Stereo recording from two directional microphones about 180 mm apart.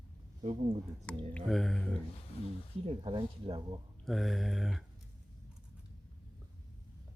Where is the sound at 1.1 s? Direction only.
5° left (ahead or behind).